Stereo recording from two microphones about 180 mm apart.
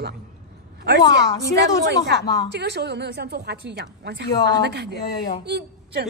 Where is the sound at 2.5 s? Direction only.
65° right (ahead or behind).